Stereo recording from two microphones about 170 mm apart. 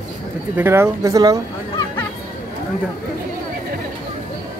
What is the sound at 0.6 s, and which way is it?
Speech, 15° right (ahead or behind).